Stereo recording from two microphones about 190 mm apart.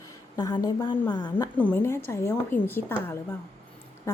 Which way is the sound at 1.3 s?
10° left (ahead or behind).